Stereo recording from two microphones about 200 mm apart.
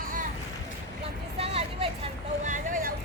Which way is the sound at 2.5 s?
45° right (ahead or behind).